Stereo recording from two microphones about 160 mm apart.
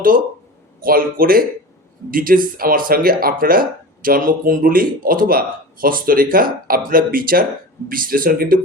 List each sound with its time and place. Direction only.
0.8 s speech: 65° right (ahead or behind)